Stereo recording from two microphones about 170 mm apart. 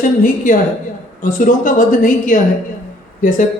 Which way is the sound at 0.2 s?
50° left (ahead or behind).